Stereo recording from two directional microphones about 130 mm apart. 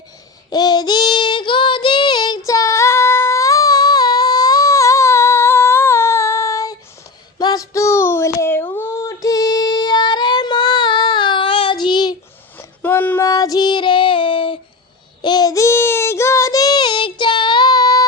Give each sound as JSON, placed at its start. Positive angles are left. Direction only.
{"t": 0.5, "sound": "child singing", "side_deg": 30}
{"t": 2.5, "sound": "female singing", "side_deg": 25}
{"t": 7.3, "sound": "a sound", "side_deg": 30}
{"t": 12.5, "sound": "a sound", "side_deg": 15}
{"t": 13.2, "sound": "child singing", "side_deg": 30}
{"t": 15.2, "sound": "child singing", "side_deg": 30}